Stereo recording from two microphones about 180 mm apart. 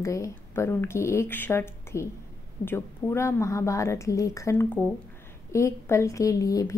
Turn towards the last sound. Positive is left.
turn(degrees=20)  # may be behind; listen again after turning